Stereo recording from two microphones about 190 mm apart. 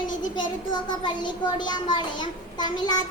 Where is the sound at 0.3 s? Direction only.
25° left (ahead or behind).